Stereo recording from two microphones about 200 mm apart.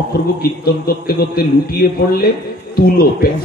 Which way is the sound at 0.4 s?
50° left (ahead or behind).